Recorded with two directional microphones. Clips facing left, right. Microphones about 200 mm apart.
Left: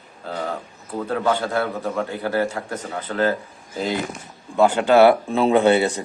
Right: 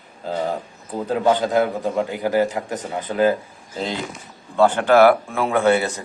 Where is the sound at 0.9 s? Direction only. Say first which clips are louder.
Right 3 dB; 15° right (ahead or behind).